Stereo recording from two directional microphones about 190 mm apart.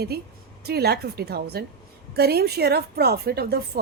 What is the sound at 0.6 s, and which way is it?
A woman's voice, 55° right (ahead or behind).